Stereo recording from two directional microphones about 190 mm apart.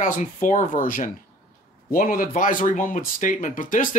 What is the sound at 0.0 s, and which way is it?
Speech, 40° left (ahead or behind).